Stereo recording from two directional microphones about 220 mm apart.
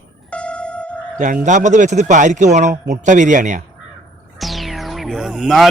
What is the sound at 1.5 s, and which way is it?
Speech, 35° right (ahead or behind).